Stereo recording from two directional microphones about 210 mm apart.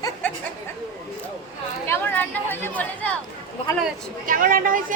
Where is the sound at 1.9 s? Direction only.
10° left (ahead or behind).